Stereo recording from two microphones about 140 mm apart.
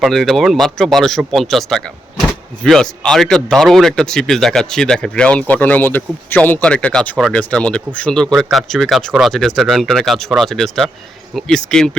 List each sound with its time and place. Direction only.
0.0 s speech: centre (ahead or behind)